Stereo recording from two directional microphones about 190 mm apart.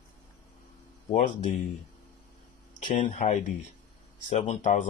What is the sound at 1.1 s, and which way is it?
Speech, 40° left (ahead or behind).